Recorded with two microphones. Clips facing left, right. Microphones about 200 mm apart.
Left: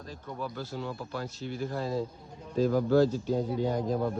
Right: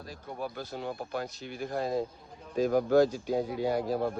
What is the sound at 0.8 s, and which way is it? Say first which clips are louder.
Speech: right 3 dB; 50° right (ahead or behind).